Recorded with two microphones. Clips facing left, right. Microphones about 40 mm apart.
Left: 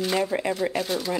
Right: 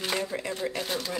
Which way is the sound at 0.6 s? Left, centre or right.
Left.